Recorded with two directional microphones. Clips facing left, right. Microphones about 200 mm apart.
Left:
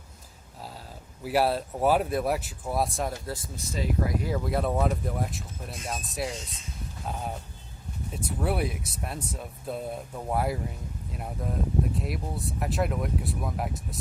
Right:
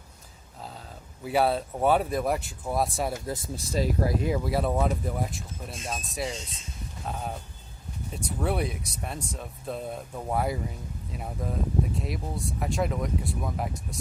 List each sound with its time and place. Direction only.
1.2 s speech: 5° left (ahead or behind)
3.2 s speech: 20° right (ahead or behind)
3.7 s speech: 35° right (ahead or behind)
4.4 s speech: centre (ahead or behind)